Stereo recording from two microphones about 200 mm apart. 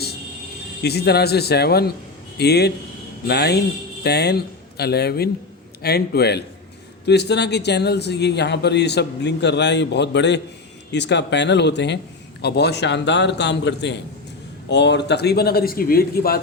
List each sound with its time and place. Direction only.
0.8 s a man's voice: 55° left (ahead or behind)